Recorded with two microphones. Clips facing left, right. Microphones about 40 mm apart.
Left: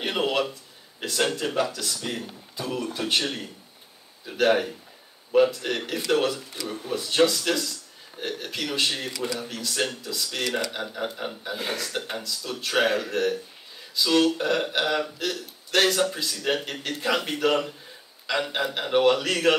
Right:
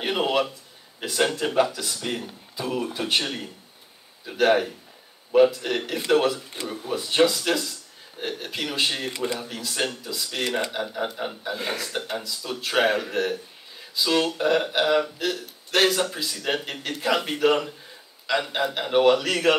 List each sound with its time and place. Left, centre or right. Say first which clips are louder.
0.0 s a sound: right 2 dB; centre
1.0 s speech: right 2 dB; centre
6.3 s speech: right 1 dB; right
6.7 s speech: right 1 dB; centre
10.7 s a man's voice: right 2 dB; centre